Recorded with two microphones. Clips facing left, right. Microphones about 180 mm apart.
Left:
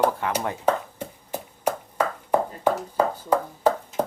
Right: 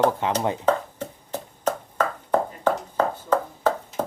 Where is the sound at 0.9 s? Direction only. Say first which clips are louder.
Right 1 dB; 10° left (ahead or behind).